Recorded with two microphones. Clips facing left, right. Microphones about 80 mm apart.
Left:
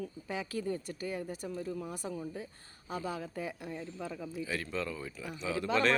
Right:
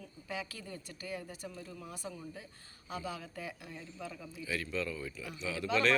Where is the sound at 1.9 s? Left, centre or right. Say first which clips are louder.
Left 5 dB; left.